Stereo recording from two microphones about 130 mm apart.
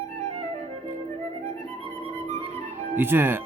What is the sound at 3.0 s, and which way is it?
Speech, 15° right (ahead or behind).